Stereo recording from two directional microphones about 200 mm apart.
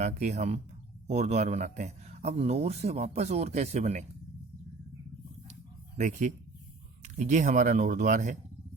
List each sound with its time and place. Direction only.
0.0 s speech: 35° right (ahead or behind)
6.0 s speech: 40° right (ahead or behind)